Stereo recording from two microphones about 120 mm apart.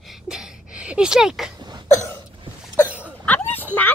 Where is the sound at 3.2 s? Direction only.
15° left (ahead or behind).